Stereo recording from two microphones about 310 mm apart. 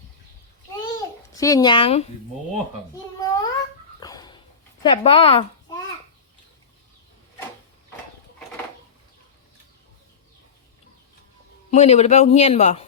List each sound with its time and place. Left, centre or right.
1.4 s speech: centre
3.2 s babbling: centre
4.0 s a sound: centre
4.8 s speech: centre
11.7 s a man's voice: left